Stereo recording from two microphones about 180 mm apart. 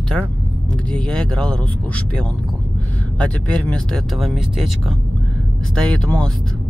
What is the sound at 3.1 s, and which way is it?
Speech, 5° left (ahead or behind).